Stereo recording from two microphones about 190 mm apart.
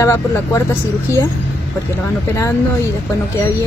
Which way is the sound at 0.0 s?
15° left (ahead or behind).